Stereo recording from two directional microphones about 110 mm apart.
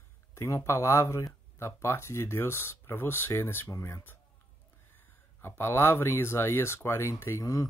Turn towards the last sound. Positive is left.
turn(degrees=30)  # may be behind; listen again after turning